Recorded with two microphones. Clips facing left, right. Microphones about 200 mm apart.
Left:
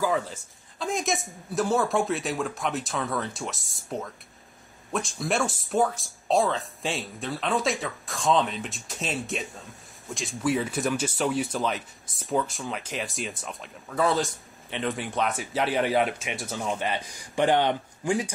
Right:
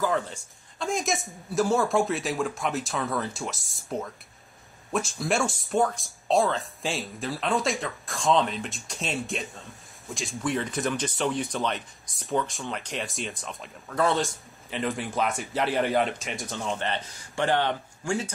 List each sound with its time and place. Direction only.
0.0 s speech: 5° left (ahead or behind)